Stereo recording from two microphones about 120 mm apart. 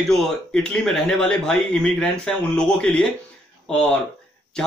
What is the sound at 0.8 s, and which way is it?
A man's voice, 5° left (ahead or behind).